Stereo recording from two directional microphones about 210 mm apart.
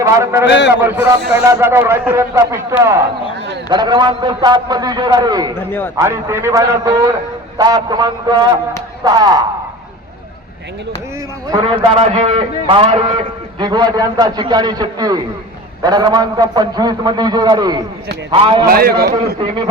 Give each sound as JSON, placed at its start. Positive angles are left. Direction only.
{"t": 0.0, "sound": "a man's voice", "side_deg": -15}
{"t": 0.4, "sound": "a man's voice", "side_deg": 55}
{"t": 0.8, "sound": "a man's voice", "side_deg": -10}
{"t": 5.5, "sound": "a man's voice", "side_deg": 10}
{"t": 6.0, "sound": "a man's voice", "side_deg": -15}
{"t": 11.5, "sound": "a man's voice", "side_deg": -25}
{"t": 18.6, "sound": "a man's voice", "side_deg": -45}